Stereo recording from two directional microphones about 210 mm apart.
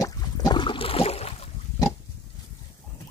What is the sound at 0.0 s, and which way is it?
Boat, 20° left (ahead or behind).